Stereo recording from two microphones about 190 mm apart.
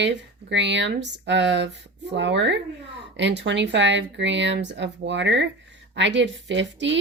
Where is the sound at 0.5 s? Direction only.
70° right (ahead or behind).